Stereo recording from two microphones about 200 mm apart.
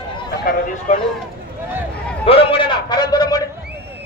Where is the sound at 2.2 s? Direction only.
30° left (ahead or behind).